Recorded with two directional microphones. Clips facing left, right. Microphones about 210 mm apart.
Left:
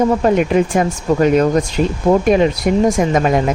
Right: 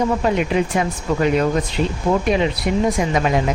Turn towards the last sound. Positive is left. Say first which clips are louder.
# left 4 dB
turn(degrees=45)  # may be behind; listen again after turning